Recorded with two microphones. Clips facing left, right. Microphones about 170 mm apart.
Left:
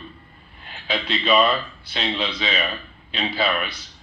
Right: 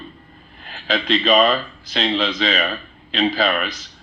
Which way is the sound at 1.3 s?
40° right (ahead or behind).